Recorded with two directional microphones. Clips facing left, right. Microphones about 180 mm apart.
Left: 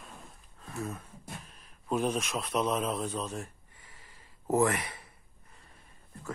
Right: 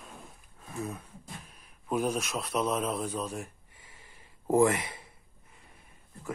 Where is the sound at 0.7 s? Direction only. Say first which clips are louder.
Right 1 dB; 15° right (ahead or behind).